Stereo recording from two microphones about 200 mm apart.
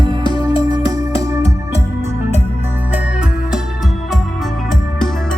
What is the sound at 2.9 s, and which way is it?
Music, 5° right (ahead or behind).